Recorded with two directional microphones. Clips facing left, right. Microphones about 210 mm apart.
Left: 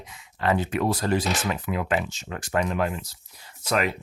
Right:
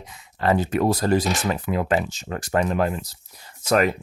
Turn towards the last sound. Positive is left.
turn(degrees=-45)  # may be behind; listen again after turning